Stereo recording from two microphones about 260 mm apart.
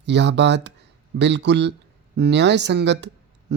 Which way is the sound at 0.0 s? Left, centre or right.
Right.